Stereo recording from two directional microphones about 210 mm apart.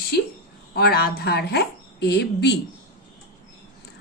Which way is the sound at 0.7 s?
45° left (ahead or behind).